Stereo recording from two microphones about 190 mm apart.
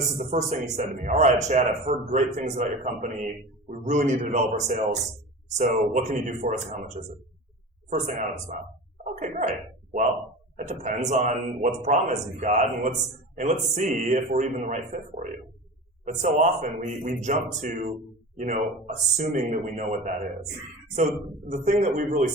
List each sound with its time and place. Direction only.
0.2 s speech: 40° right (ahead or behind)
9.1 s a sound: 40° right (ahead or behind)
10.6 s speech: 40° right (ahead or behind)
21.5 s speech: 40° right (ahead or behind)